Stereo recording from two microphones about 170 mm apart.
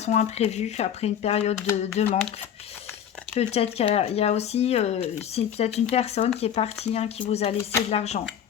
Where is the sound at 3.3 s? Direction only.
40° left (ahead or behind).